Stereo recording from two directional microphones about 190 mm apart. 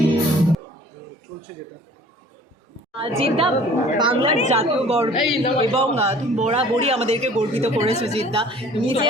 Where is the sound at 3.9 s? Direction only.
25° right (ahead or behind).